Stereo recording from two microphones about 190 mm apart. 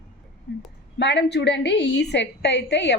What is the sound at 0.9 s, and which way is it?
A woman's voice, 65° left (ahead or behind).